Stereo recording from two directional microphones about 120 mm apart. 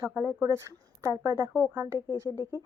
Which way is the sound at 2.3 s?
30° left (ahead or behind).